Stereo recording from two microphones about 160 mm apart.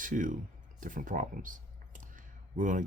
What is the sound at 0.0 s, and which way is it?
Speech, 55° right (ahead or behind).